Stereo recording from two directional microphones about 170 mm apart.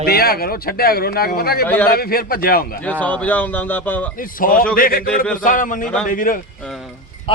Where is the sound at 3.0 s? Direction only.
10° left (ahead or behind).